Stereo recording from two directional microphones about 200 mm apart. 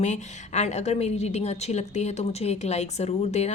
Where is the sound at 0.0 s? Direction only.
35° left (ahead or behind).